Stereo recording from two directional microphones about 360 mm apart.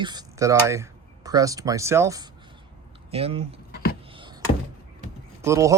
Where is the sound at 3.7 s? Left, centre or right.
Left.